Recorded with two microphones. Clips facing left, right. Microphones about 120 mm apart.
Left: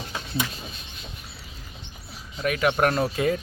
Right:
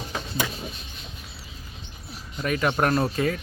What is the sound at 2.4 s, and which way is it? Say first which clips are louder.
Speech: left 1 dB; 5° left (ahead or behind).